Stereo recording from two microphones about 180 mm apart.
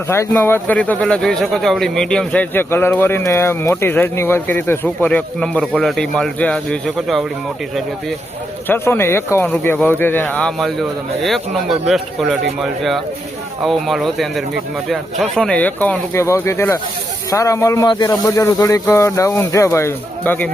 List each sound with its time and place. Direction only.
0.1 s speech: 15° left (ahead or behind)
8.6 s speech: 10° left (ahead or behind)
13.6 s speech: centre (ahead or behind)